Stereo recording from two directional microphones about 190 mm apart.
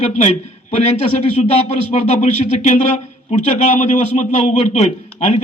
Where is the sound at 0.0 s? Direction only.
35° left (ahead or behind).